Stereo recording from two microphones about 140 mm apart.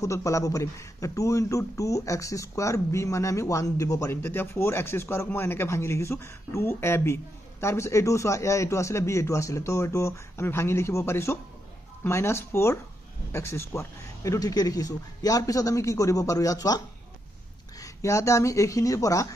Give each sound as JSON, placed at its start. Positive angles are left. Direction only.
{"t": 0.0, "sound": "a man's voice", "side_deg": 25}